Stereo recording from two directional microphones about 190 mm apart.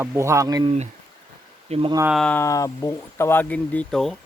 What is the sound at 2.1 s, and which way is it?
Speech, 5° left (ahead or behind).